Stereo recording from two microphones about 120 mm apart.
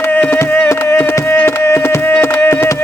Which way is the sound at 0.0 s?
15° left (ahead or behind).